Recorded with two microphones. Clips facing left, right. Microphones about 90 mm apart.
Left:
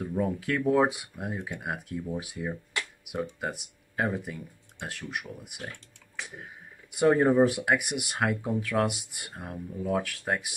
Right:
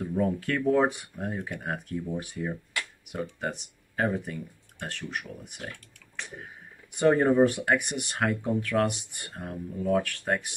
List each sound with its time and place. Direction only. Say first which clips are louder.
0.0 s speech: right 2 dB; 5° left (ahead or behind)